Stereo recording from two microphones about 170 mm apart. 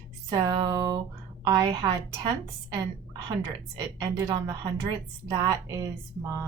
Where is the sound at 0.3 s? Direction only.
25° right (ahead or behind).